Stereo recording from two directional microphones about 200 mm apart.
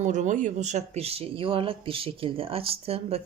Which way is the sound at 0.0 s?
35° right (ahead or behind).